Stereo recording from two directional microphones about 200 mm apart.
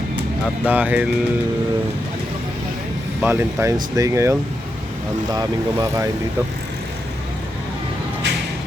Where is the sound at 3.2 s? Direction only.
10° right (ahead or behind).